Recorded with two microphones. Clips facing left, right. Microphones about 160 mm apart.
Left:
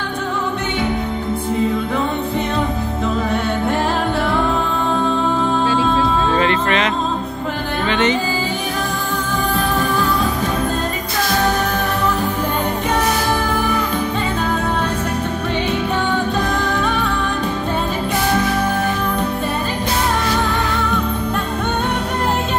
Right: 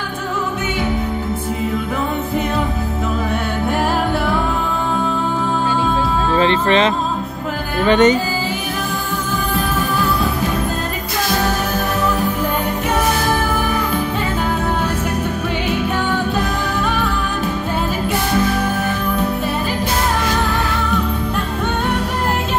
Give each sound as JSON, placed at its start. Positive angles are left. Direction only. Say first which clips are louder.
{"t": 6.4, "sound": "music", "louder": "right 3 dB", "side_deg": -30}
{"t": 7.8, "sound": "music", "louder": "right 6 dB", "side_deg": -45}